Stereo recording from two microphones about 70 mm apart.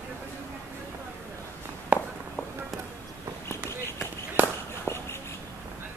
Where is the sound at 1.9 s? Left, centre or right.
Right.